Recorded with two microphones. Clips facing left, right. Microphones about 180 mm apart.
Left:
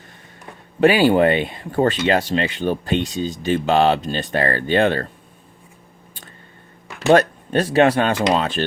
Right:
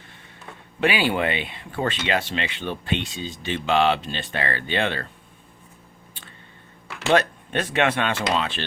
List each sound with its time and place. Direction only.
0.8 s speech: 40° left (ahead or behind)
7.1 s speech: 40° left (ahead or behind)